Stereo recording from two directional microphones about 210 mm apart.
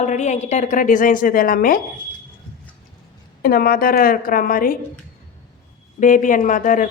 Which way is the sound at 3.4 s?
45° left (ahead or behind).